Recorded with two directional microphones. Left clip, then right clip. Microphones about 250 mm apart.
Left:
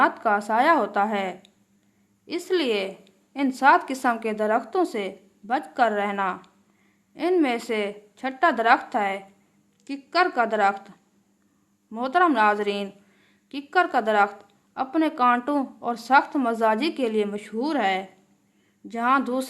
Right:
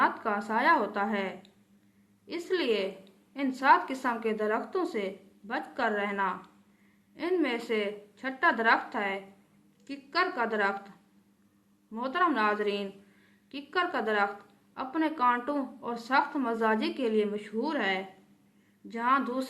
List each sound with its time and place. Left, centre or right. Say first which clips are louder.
0.0 s a woman's voice: left 7 dB; left